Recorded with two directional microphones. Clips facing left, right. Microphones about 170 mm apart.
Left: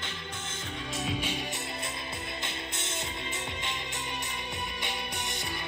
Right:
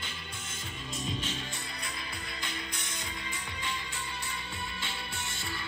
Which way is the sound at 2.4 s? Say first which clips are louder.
Left 2 dB; 25° left (ahead or behind).